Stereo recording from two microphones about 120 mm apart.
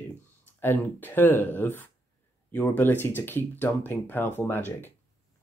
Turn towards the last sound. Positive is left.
turn(degrees=15)  # may be behind; listen again after turning